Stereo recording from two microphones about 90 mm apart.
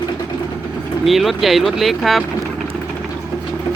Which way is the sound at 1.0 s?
Centre (ahead or behind).